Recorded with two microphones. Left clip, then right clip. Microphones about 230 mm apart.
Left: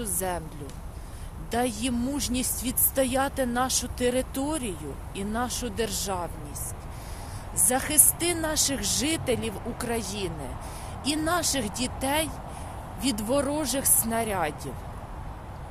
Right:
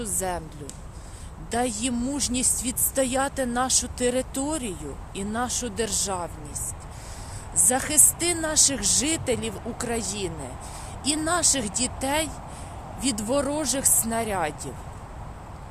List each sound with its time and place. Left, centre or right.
0.0 s a woman's voice: centre
1.5 s a woman's voice: centre
7.6 s a woman's voice: centre